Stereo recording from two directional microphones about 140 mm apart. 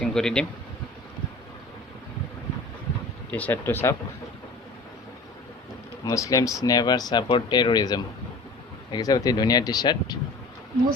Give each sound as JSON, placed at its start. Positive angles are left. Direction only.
{"t": 0.0, "sound": "speech", "side_deg": 5}
{"t": 3.3, "sound": "speech", "side_deg": 15}
{"t": 6.1, "sound": "speech", "side_deg": 25}